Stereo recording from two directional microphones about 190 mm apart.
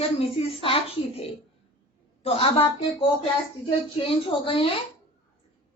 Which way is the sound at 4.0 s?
30° left (ahead or behind).